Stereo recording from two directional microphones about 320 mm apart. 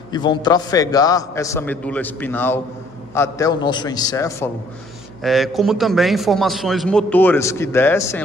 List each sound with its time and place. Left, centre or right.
0.1 s a man's voice: centre